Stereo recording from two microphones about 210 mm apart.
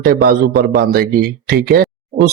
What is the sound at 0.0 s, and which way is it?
Speech, 45° right (ahead or behind).